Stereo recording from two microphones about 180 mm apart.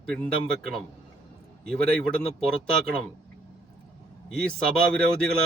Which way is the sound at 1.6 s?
5° left (ahead or behind).